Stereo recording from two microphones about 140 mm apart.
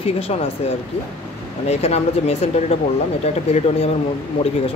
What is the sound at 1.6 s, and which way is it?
Speech, 50° left (ahead or behind).